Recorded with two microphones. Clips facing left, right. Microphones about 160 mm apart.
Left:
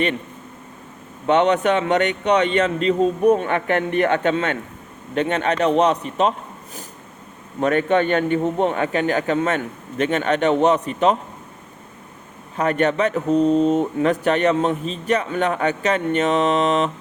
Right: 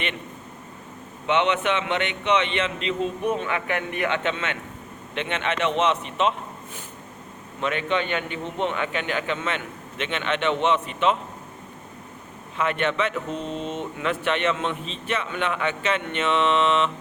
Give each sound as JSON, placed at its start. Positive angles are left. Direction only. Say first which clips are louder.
{"t": 1.3, "sound": "speech", "louder": "left 6 dB", "side_deg": 40}
{"t": 7.6, "sound": "speech", "louder": "left 8 dB", "side_deg": 45}
{"t": 12.5, "sound": "speech", "louder": "left 5 dB", "side_deg": 40}